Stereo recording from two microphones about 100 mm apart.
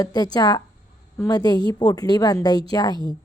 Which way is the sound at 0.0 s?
40° left (ahead or behind).